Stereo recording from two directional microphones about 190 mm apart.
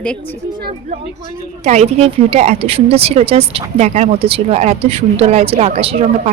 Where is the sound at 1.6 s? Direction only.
35° right (ahead or behind).